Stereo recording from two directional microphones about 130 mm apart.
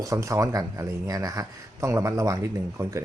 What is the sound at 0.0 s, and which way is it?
A man's voice, 25° right (ahead or behind).